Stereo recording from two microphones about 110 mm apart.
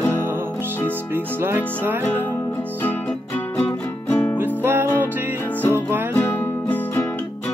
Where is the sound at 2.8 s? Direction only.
10° left (ahead or behind).